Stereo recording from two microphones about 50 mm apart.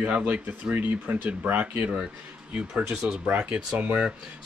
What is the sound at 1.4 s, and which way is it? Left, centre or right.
Speech, right.